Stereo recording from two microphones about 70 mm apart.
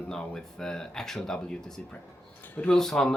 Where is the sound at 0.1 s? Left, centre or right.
Centre.